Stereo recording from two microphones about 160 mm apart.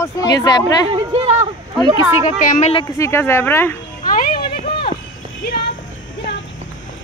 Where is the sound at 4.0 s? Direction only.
55° left (ahead or behind).